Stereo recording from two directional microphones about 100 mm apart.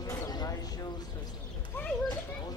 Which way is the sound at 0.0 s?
35° left (ahead or behind).